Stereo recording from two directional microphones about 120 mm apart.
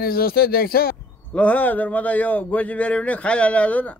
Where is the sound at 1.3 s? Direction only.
10° left (ahead or behind).